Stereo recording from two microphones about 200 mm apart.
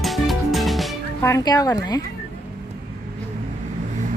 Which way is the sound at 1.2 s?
15° left (ahead or behind).